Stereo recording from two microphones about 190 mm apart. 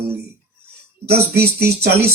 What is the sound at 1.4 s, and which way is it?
Speech, 55° right (ahead or behind).